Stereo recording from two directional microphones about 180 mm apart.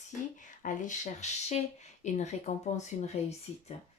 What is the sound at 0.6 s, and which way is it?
Speech, 45° left (ahead or behind).